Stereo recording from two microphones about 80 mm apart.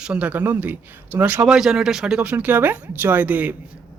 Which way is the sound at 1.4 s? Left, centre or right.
Centre.